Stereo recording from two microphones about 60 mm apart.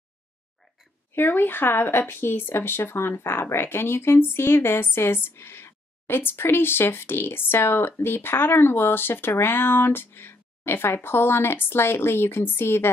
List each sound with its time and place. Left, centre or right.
1.1 s a woman's voice: left